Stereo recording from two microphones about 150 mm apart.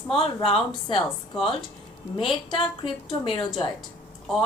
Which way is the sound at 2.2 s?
40° left (ahead or behind).